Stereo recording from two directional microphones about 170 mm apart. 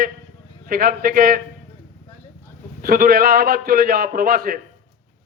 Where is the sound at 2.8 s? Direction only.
60° right (ahead or behind).